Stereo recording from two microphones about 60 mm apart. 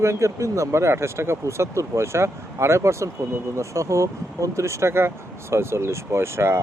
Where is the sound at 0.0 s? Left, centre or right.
Right.